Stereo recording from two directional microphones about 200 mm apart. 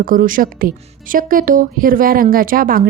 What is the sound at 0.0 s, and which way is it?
Speech, 45° right (ahead or behind).